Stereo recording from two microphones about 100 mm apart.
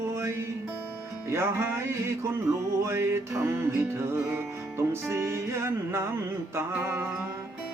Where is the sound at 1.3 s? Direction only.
25° right (ahead or behind).